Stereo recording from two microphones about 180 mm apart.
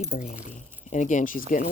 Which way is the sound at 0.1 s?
40° left (ahead or behind).